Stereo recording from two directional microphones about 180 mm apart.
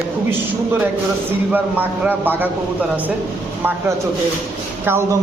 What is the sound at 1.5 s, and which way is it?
Speech, 10° right (ahead or behind).